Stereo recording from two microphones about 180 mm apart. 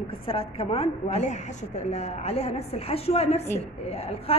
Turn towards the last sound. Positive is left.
turn(degrees=35)  # may be behind; listen again after turning